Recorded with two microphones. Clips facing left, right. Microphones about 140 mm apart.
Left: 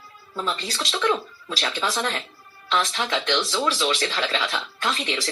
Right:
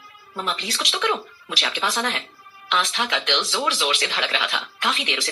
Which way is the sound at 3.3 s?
15° right (ahead or behind).